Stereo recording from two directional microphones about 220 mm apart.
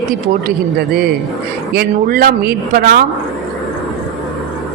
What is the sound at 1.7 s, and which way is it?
A woman's voice, 45° right (ahead or behind).